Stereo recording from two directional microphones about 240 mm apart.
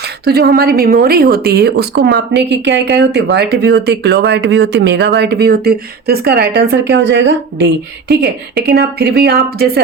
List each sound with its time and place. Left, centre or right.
0.3 s speech: right